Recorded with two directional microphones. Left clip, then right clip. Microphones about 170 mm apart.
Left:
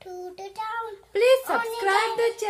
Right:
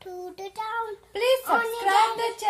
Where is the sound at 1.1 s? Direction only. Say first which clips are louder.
Left 3 dB; 20° left (ahead or behind).